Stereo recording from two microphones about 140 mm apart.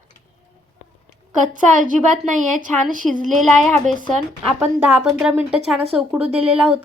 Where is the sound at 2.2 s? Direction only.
65° right (ahead or behind).